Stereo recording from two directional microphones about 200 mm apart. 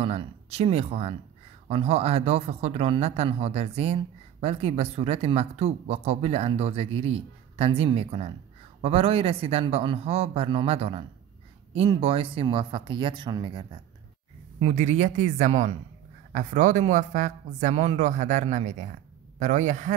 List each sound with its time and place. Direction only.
0.0 s speech: 30° right (ahead or behind)
14.6 s a man's voice: 35° right (ahead or behind)